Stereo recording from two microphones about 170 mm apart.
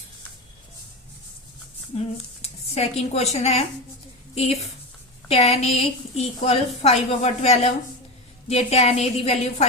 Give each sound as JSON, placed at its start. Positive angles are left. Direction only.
{"t": 2.0, "sound": "speech", "side_deg": 35}
{"t": 5.3, "sound": "a woman's voice", "side_deg": 35}